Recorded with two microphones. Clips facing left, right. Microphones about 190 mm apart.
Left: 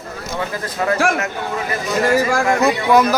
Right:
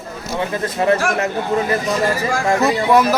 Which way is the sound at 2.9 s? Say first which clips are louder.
Even; centre (ahead or behind).